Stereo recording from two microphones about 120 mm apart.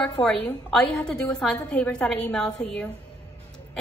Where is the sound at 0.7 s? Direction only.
5° left (ahead or behind).